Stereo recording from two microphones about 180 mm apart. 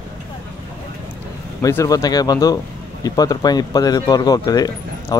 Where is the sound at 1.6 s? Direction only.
15° left (ahead or behind).